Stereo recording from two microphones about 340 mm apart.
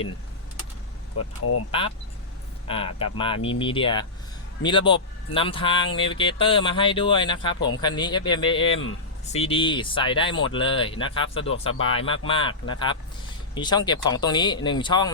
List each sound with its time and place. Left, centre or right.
1.2 s speech: left
2.6 s speech: centre